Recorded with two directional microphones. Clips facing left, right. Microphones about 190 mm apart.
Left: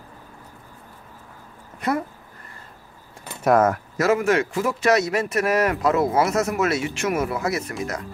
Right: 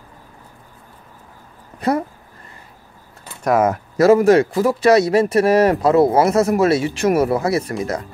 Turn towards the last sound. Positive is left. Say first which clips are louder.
# right 6 dB
turn(degrees=-30)  # may be behind; listen again after turning